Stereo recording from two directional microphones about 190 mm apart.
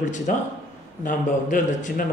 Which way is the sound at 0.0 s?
40° left (ahead or behind).